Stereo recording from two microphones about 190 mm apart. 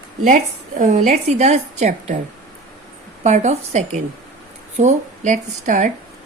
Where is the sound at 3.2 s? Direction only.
35° right (ahead or behind).